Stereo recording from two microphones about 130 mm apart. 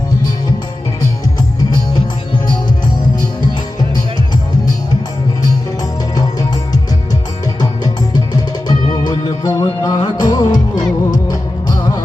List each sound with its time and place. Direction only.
8.1 s music: 30° left (ahead or behind)